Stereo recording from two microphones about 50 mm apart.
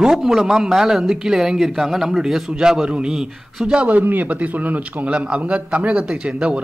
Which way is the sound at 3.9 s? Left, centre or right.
Right.